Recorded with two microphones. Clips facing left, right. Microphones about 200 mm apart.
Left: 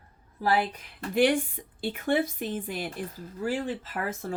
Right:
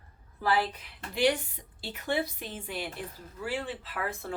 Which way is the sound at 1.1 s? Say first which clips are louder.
Left 4 dB; 50° left (ahead or behind).